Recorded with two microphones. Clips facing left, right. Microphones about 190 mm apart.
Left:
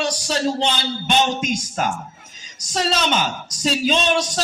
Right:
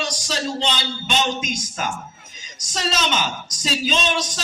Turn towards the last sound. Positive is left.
turn(degrees=60)  # may be behind; listen again after turning